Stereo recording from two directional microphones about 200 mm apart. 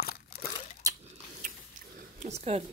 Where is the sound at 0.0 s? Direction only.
55° left (ahead or behind).